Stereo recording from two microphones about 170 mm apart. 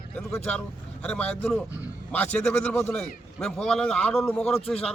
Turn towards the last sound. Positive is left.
turn(degrees=5)  # may be behind; listen again after turning